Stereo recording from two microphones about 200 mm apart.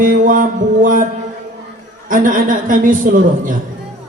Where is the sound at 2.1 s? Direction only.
40° right (ahead or behind).